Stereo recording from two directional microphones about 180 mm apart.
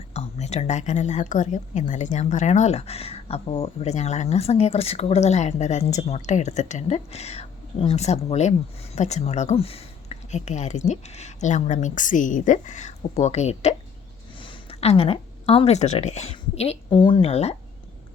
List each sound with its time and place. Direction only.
0.1 s a woman's voice: 35° left (ahead or behind)